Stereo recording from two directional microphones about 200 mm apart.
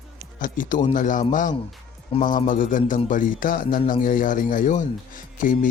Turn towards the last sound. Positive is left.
turn(degrees=40)  # may be behind; listen again after turning